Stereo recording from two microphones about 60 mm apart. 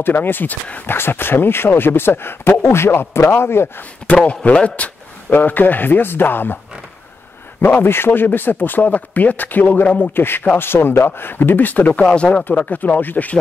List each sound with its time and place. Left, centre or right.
0.0 s speech: left
4.1 s speech: left
7.6 s speech: left